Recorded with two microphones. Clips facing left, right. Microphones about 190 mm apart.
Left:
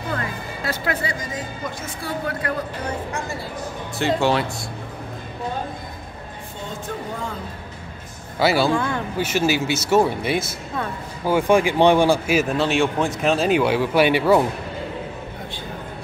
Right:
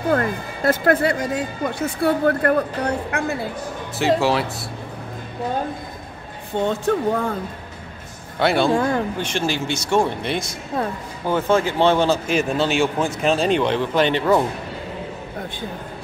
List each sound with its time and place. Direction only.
0.1 s speech: 50° right (ahead or behind)
4.0 s speech: centre (ahead or behind)
6.6 s speech: 65° right (ahead or behind)
8.4 s speech: 5° left (ahead or behind)
8.7 s speech: 35° right (ahead or behind)
9.2 s speech: 5° left (ahead or behind)